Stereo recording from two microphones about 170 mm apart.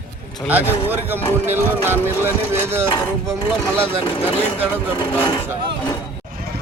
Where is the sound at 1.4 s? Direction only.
15° right (ahead or behind).